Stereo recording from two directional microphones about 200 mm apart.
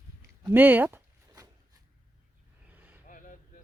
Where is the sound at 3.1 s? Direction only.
45° left (ahead or behind).